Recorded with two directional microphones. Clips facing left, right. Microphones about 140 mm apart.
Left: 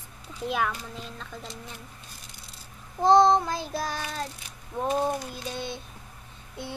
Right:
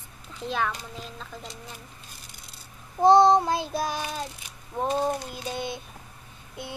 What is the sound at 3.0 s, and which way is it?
Child singing, 10° right (ahead or behind).